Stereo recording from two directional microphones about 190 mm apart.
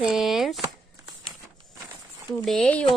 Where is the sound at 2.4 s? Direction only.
Centre (ahead or behind).